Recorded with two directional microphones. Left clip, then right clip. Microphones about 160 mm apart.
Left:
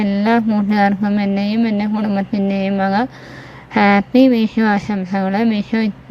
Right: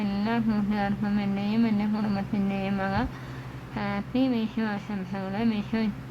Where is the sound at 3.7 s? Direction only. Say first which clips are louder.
Left 17 dB; 45° left (ahead or behind).